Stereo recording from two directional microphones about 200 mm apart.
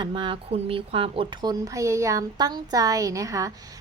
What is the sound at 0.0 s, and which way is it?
A woman's voice, 25° right (ahead or behind).